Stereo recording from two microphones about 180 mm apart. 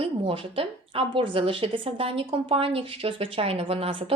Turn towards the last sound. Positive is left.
turn(degrees=-30)  # may be behind; listen again after turning